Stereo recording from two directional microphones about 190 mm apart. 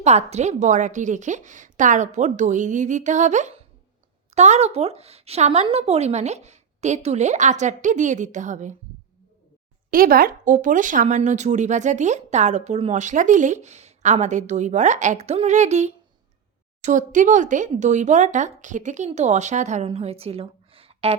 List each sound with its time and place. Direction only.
0.0 s speech: 35° right (ahead or behind)
9.9 s speech: 50° right (ahead or behind); by 21.2 s 30° right (ahead or behind)